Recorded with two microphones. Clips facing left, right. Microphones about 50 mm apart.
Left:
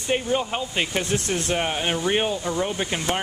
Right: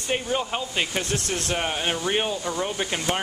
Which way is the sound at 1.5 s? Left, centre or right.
Centre.